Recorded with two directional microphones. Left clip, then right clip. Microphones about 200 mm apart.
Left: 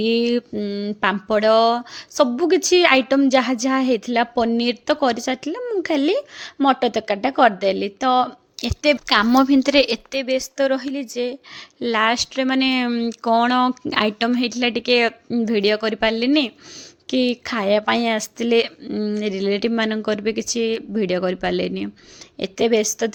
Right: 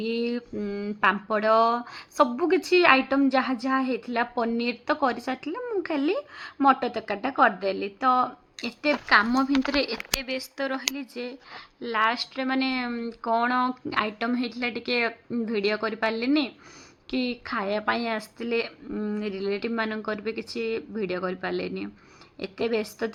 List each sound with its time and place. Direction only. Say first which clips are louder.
0.0 s speech: left 9 dB; 45° left (ahead or behind)